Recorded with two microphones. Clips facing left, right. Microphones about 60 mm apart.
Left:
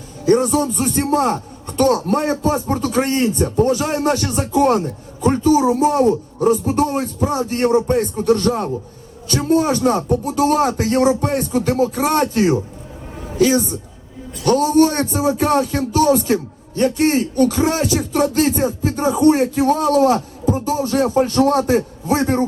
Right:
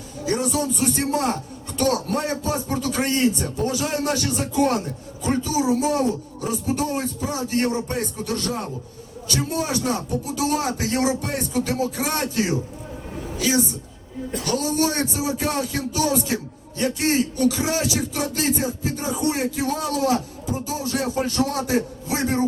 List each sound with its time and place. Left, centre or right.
0.3 s a man's voice: left